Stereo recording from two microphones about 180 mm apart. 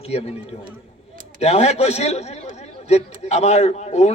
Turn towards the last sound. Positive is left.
turn(degrees=40)  # may be behind; listen again after turning